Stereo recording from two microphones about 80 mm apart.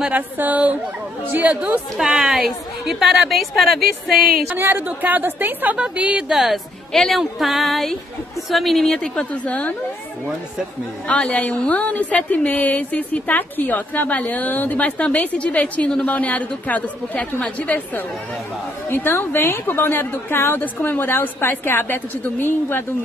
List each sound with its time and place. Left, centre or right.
0.0 s a woman's voice: right; by 4.2 s centre
4.5 s a woman's voice: right; by 9.8 s centre
11.1 s a woman's voice: centre
18.9 s a woman's voice: left